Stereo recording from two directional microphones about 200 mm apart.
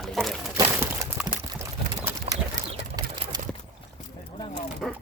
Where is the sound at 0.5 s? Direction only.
10° right (ahead or behind).